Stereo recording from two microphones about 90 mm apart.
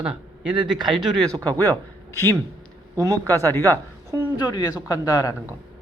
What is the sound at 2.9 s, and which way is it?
A man's voice, 35° right (ahead or behind).